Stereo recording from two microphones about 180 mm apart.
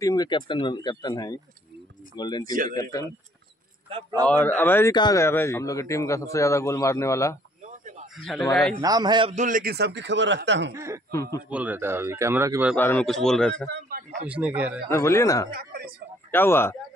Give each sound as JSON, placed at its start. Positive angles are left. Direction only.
{"t": 0.0, "sound": "speech", "side_deg": 20}
{"t": 3.9, "sound": "speech", "side_deg": -20}
{"t": 4.3, "sound": "a man's voice", "side_deg": 10}
{"t": 7.6, "sound": "a sound", "side_deg": -45}
{"t": 8.2, "sound": "a man's voice", "side_deg": 0}
{"t": 8.7, "sound": "speech", "side_deg": -20}
{"t": 9.3, "sound": "a man's voice", "side_deg": -45}
{"t": 10.7, "sound": "a man's voice", "side_deg": -15}
{"t": 12.7, "sound": "a man's voice", "side_deg": 10}
{"t": 13.7, "sound": "a woman's voice", "side_deg": -55}
{"t": 14.2, "sound": "a man's voice", "side_deg": -10}
{"t": 14.9, "sound": "a man's voice", "side_deg": 15}
{"t": 15.5, "sound": "a woman's voice", "side_deg": -55}
{"t": 16.3, "sound": "speech", "side_deg": 10}